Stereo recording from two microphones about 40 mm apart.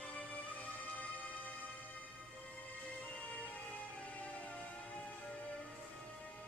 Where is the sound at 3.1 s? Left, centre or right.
Left.